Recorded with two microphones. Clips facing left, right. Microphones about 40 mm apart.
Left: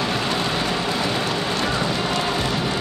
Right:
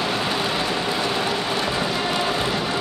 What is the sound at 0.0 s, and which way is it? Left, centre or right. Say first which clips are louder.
Vehicle: even; centre.